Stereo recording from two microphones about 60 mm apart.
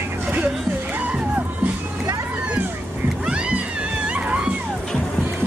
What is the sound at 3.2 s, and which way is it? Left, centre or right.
Music, centre.